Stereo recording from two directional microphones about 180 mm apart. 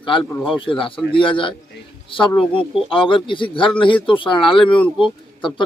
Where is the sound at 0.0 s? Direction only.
30° left (ahead or behind).